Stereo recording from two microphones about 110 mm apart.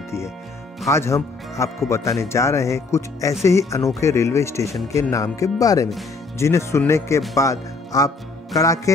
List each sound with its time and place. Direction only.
0.8 s speech: 25° left (ahead or behind)
8.5 s music: 30° left (ahead or behind)